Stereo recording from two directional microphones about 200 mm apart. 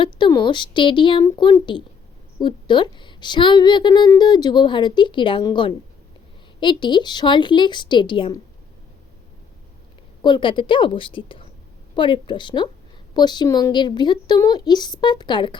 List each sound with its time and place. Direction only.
0.0 s a woman's voice: 25° left (ahead or behind)
10.2 s a woman's voice: 25° left (ahead or behind)